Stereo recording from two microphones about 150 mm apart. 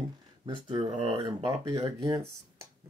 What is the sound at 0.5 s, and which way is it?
Speech, 30° right (ahead or behind).